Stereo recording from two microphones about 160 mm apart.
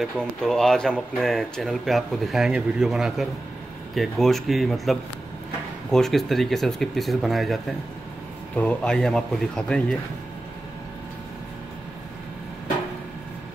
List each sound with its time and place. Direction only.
0.0 s speech: 5° left (ahead or behind)